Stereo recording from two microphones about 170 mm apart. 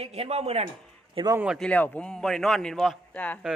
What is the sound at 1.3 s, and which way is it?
Speech, 5° right (ahead or behind).